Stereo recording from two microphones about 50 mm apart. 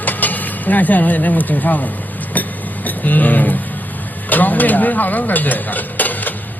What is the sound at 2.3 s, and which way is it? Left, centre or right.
Chink, left.